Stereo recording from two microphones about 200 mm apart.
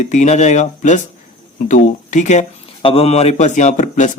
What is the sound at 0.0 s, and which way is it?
Speech, 35° left (ahead or behind).